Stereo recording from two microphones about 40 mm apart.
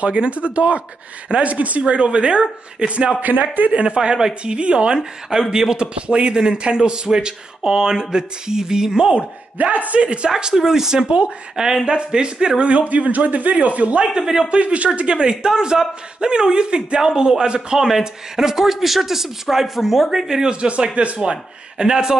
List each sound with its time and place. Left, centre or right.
0.0 s speech: right
3.2 s speech: right
3.7 s a man's voice: right
4.6 s a man's voice: right
9.1 s speech: right
10.3 s speech: centre; by 14.0 s right
14.0 s a man's voice: centre
14.5 s speech: right
15.0 s a man's voice: right
20.6 s speech: right
21.2 s a man's voice: centre